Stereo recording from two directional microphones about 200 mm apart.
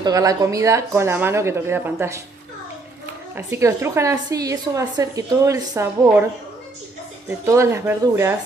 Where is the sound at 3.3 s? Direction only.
15° right (ahead or behind).